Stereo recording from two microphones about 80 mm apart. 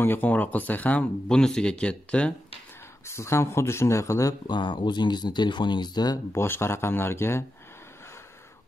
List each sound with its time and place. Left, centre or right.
0.0 s speech: left
3.1 s speech: left
4.5 s speech: left
6.3 s speech: left